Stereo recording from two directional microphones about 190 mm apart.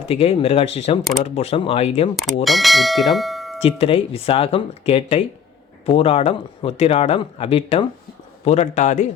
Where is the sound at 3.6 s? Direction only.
30° left (ahead or behind).